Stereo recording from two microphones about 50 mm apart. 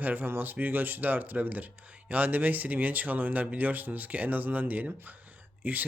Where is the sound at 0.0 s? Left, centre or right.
Right.